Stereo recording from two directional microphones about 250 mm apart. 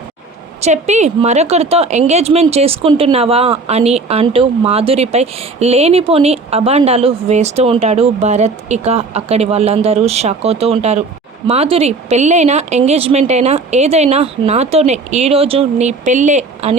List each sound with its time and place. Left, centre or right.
0.6 s speech: right